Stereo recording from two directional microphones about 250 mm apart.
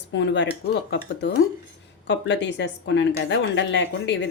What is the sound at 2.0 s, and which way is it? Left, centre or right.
A woman's voice, left.